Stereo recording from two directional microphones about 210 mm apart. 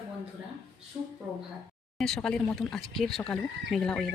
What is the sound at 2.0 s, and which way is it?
Speech, centre (ahead or behind).